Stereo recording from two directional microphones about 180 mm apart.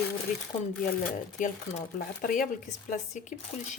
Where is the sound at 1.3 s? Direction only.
45° left (ahead or behind).